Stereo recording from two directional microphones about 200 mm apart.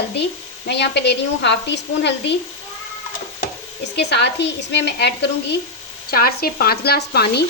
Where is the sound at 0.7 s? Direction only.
60° left (ahead or behind).